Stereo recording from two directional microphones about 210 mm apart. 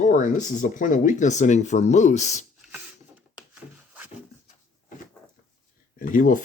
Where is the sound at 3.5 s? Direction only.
10° right (ahead or behind).